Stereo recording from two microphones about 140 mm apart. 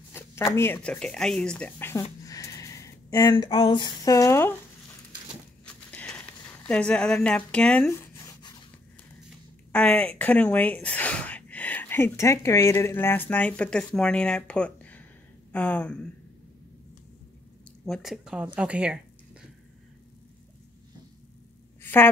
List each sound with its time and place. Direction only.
0.5 s speech: 20° left (ahead or behind)
0.7 s speech: 5° left (ahead or behind)
2.2 s a sound: 25° left (ahead or behind)
3.4 s speech: 35° left (ahead or behind); by 4.6 s 20° left (ahead or behind)
5.9 s a sound: 10° left (ahead or behind)
7.9 s zipper: 20° left (ahead or behind)
9.7 s speech: 10° left (ahead or behind)
17.8 s speech: centre (ahead or behind)
21.8 s speech: 15° left (ahead or behind)